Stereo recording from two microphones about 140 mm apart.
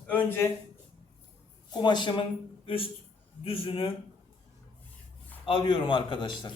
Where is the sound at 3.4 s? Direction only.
40° left (ahead or behind).